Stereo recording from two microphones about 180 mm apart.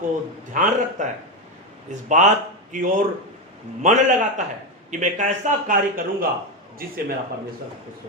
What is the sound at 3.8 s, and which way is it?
Speech, 45° right (ahead or behind).